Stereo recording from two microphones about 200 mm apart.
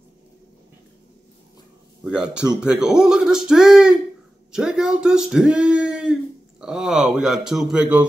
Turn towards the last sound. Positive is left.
turn(degrees=-5)  # may be behind; listen again after turning